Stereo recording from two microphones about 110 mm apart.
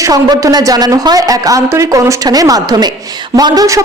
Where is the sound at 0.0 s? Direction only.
30° right (ahead or behind).